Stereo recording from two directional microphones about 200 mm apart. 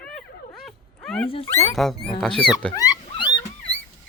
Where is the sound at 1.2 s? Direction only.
25° left (ahead or behind).